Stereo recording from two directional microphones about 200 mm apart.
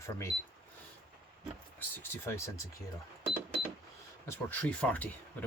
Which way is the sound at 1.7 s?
10° left (ahead or behind).